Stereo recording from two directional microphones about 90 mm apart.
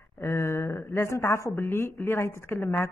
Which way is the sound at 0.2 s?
30° left (ahead or behind).